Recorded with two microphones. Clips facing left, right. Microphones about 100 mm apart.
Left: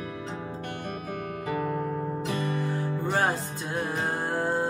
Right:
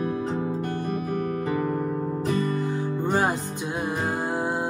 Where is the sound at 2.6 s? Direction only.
20° right (ahead or behind).